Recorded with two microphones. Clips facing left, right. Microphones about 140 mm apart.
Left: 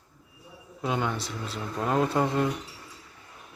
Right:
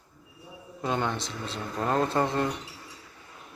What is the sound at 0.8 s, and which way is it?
Speech, 5° left (ahead or behind).